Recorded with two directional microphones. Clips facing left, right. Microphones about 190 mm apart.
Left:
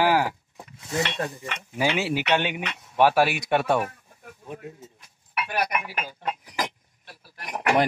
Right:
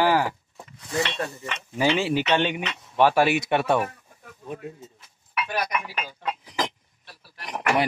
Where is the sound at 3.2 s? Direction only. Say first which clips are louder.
Right 1 dB; centre (ahead or behind).